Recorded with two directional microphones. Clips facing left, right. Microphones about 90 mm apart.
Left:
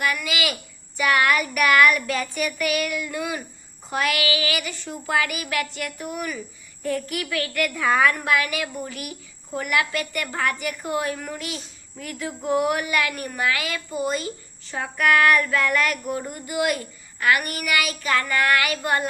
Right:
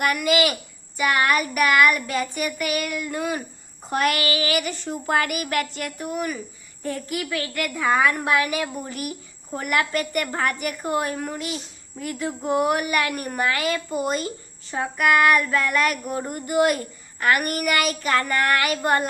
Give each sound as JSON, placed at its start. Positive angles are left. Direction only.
{"t": 0.0, "sound": "child singing", "side_deg": -50}
{"t": 1.0, "sound": "child singing", "side_deg": -25}
{"t": 2.4, "sound": "a woman's voice", "side_deg": -30}
{"t": 3.8, "sound": "child singing", "side_deg": -40}
{"t": 7.8, "sound": "a woman's voice", "side_deg": -10}
{"t": 8.2, "sound": "a woman's voice", "side_deg": -30}
{"t": 11.9, "sound": "child singing", "side_deg": -25}
{"t": 13.1, "sound": "a woman's voice", "side_deg": -35}
{"t": 13.9, "sound": "child singing", "side_deg": -50}
{"t": 14.7, "sound": "child singing", "side_deg": -25}
{"t": 16.2, "sound": "a woman's voice", "side_deg": -45}